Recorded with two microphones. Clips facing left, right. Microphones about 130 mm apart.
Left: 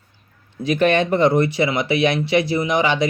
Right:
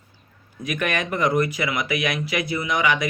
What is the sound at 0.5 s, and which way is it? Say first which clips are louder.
Speech: left 9 dB; 30° left (ahead or behind).